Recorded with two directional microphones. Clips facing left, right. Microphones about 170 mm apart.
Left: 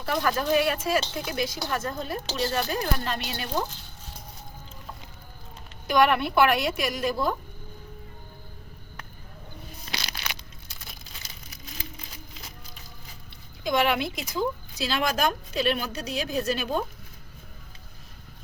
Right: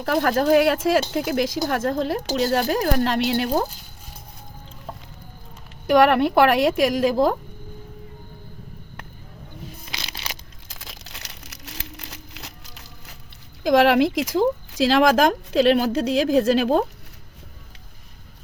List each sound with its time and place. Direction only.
0.0 s speech: 65° right (ahead or behind)
5.9 s speech: 85° right
10.7 s a sound: 90° right
13.7 s speech: 90° right